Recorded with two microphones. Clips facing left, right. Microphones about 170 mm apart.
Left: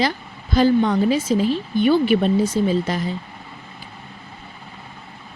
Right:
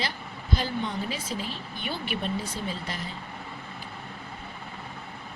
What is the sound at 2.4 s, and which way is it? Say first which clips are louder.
Speech: left 15 dB; 90° left.